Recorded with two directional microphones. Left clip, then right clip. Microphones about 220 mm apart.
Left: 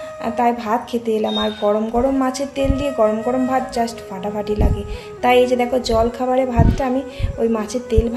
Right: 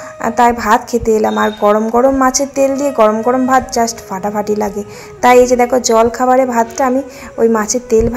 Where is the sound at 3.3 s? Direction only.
10° right (ahead or behind).